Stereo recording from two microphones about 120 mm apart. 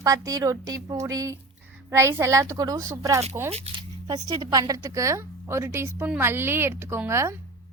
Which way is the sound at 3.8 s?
30° right (ahead or behind).